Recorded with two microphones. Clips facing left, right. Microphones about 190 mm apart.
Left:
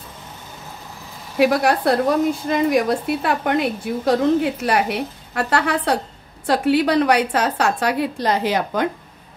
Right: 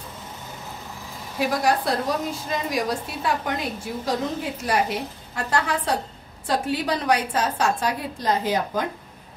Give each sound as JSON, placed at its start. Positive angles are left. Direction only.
{"t": 1.4, "sound": "a woman's voice", "side_deg": 65}